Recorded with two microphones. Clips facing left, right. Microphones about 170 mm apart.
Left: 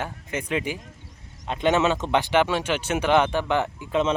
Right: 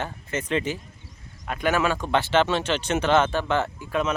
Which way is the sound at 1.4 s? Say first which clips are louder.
Left 2 dB; 25° left (ahead or behind).